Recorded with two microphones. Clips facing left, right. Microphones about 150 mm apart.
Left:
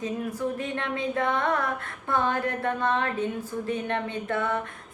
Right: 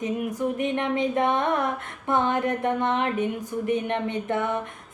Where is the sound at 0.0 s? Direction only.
20° right (ahead or behind).